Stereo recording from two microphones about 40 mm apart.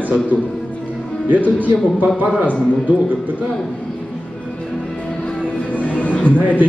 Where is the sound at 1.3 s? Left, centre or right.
Right.